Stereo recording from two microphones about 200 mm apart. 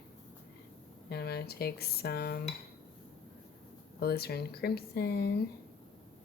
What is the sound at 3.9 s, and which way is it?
Speech, 55° left (ahead or behind).